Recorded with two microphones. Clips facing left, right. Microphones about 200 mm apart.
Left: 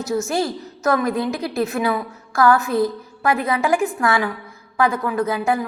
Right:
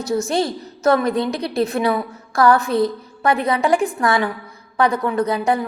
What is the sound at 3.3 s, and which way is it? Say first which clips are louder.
A woman's voice: right 2 dB; 5° left (ahead or behind).